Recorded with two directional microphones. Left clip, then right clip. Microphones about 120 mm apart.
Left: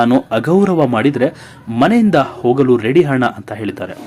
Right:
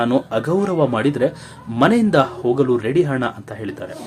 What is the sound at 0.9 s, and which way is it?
Speech, 25° left (ahead or behind).